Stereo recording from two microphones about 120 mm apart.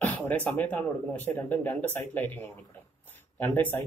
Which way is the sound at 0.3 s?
15° left (ahead or behind).